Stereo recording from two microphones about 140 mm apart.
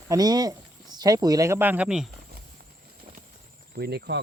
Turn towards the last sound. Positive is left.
turn(degrees=-90)